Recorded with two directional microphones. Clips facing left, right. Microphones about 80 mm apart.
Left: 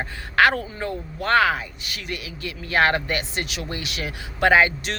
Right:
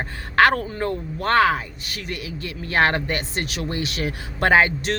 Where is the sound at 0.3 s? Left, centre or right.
Right.